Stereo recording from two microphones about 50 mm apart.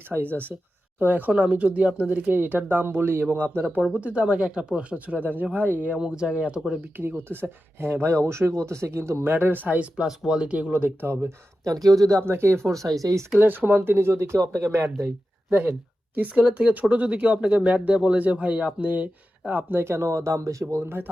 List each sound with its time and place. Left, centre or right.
0.9 s speech: right
1.3 s speech: right
3.9 s speech: right
6.0 s speech: right
6.9 s speech: right
9.3 s speech: right
10.2 s speech: centre
11.0 s speech: right
11.6 s speech: right
12.2 s speech: right
13.4 s speech: right
15.4 s speech: right
19.8 s speech: right